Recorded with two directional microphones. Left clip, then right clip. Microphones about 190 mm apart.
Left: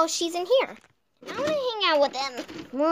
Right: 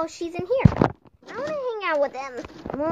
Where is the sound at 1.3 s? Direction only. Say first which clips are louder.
Left 2 dB; 5° left (ahead or behind).